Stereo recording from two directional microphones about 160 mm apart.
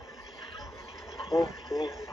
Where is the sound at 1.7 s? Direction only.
20° left (ahead or behind).